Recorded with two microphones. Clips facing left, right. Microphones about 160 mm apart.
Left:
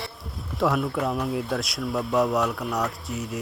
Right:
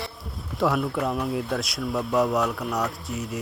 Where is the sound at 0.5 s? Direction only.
Centre (ahead or behind).